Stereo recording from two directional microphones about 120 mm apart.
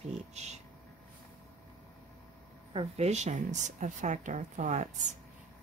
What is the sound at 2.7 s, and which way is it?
Speech, 65° right (ahead or behind).